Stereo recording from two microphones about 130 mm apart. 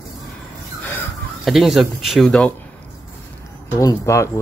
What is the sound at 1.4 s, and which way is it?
Speech, centre (ahead or behind).